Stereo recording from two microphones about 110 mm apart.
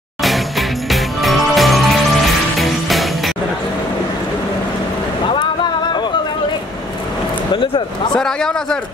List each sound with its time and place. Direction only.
0.2 s music: centre (ahead or behind)
7.5 s speech: 50° left (ahead or behind)
8.2 s speech: 5° left (ahead or behind)